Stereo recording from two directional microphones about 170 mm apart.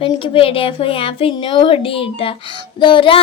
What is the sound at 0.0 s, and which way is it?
A woman's voice, 30° left (ahead or behind).